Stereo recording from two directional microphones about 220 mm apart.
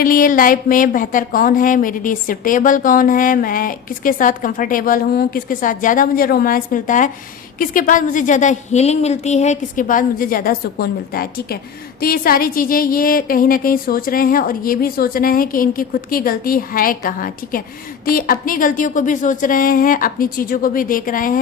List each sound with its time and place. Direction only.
0.0 s speech: 40° left (ahead or behind)